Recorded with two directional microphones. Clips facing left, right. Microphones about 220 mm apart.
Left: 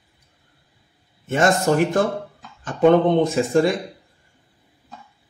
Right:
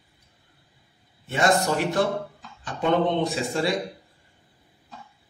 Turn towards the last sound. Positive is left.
turn(degrees=50)  # may be behind; listen again after turning